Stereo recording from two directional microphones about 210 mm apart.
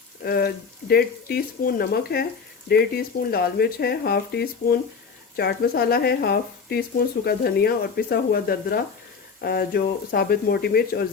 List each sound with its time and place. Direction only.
0.2 s speech: 45° left (ahead or behind)